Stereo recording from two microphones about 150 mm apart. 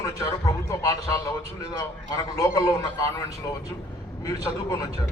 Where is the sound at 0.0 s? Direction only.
25° left (ahead or behind).